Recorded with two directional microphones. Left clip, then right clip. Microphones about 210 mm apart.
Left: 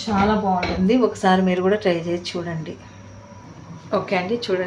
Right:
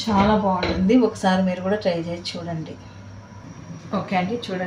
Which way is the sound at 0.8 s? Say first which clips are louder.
Left 2 dB; 30° left (ahead or behind).